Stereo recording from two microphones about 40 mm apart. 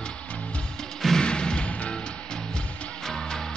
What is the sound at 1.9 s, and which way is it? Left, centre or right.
Music, left.